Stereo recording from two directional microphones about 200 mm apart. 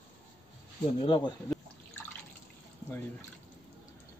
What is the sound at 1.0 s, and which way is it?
Speech, 25° left (ahead or behind).